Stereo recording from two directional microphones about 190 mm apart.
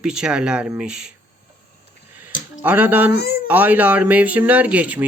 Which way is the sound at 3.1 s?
55° left (ahead or behind).